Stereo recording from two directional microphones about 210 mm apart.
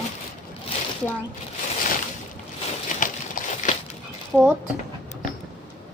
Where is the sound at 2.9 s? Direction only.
35° left (ahead or behind).